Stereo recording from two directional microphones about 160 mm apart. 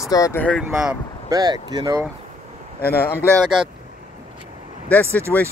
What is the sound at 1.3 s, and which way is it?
Speech, 25° right (ahead or behind).